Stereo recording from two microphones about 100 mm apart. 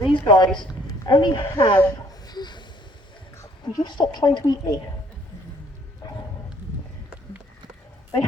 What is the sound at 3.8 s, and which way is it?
Speech, 50° left (ahead or behind).